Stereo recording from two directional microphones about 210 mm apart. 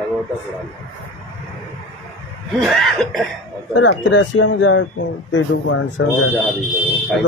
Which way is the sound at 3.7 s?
65° left (ahead or behind).